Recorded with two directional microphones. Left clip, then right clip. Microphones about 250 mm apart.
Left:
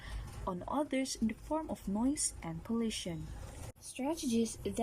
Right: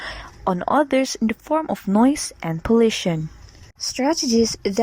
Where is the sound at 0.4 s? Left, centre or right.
Right.